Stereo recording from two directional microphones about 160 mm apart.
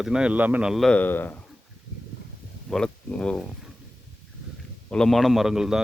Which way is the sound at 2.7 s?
5° left (ahead or behind).